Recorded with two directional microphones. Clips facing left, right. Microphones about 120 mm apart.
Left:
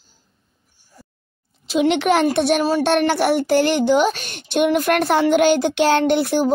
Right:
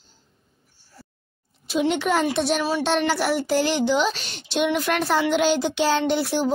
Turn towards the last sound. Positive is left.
turn(degrees=55)  # may be behind; listen again after turning